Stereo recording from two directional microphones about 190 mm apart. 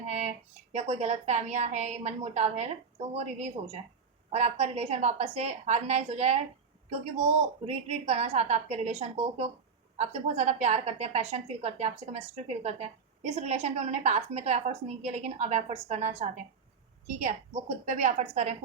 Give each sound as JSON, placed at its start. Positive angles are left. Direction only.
{"t": 0.0, "sound": "a woman's voice", "side_deg": -35}